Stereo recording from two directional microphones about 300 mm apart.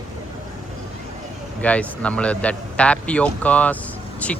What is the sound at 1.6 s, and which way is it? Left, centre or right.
A man's voice, centre.